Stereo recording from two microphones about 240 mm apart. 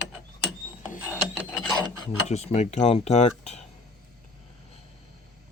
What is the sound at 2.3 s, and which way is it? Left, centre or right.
Speech, left.